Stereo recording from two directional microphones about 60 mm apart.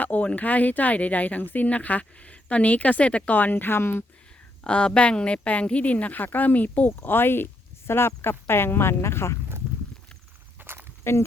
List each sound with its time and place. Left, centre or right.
0.0 s speech: left
4.6 s a woman's voice: centre; by 9.4 s left
10.6 s walk: right
11.1 s speech: left